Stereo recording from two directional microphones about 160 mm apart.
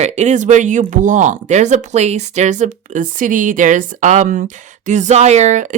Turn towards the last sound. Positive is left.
turn(degrees=-50)  # may be behind; listen again after turning